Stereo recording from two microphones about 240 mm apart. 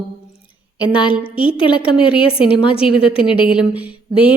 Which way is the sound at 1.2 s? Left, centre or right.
Left.